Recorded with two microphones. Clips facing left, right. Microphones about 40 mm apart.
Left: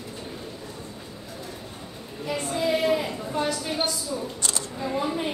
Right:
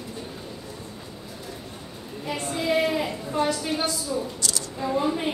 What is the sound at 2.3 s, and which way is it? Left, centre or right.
Female singing, centre.